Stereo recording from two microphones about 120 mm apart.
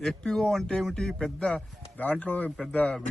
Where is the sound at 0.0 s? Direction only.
5° left (ahead or behind).